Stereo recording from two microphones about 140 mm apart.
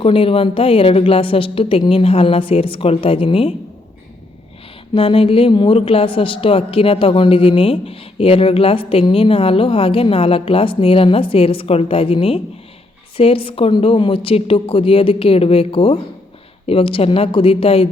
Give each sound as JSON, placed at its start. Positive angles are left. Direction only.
{"t": 0.0, "sound": "speech", "side_deg": 40}
{"t": 4.9, "sound": "a woman's voice", "side_deg": 40}